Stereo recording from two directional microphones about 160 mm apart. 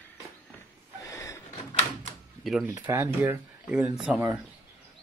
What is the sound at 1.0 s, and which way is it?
Vehicle, 20° left (ahead or behind).